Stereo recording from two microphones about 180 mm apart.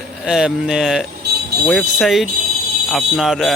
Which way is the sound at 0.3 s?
5° right (ahead or behind).